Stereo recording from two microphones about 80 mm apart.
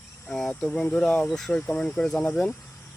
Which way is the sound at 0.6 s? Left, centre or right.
Centre.